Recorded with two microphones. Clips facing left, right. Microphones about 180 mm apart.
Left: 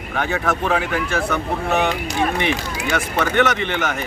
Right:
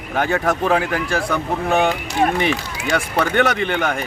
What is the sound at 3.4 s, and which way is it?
Speech, 35° right (ahead or behind).